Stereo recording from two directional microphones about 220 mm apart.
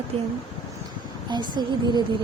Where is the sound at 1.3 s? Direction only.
20° right (ahead or behind).